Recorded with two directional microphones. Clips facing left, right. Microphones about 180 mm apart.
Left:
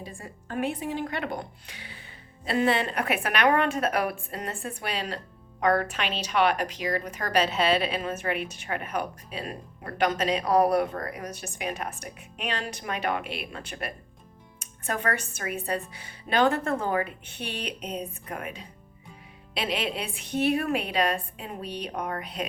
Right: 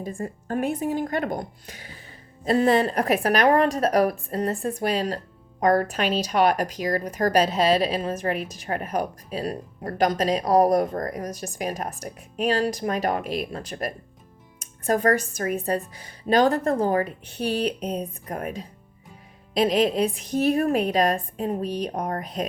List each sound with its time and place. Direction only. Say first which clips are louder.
0.0 s a woman's voice: right 10 dB; 45° right (ahead or behind)